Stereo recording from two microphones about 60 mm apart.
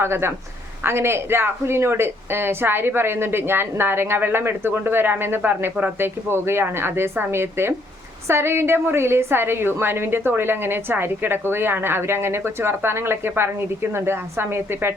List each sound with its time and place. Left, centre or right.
0.0 s speech: right